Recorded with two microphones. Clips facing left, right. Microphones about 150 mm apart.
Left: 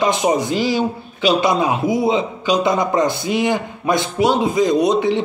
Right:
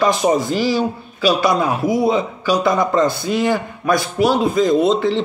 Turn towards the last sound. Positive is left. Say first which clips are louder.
# even
turn(degrees=15)  # may be behind; listen again after turning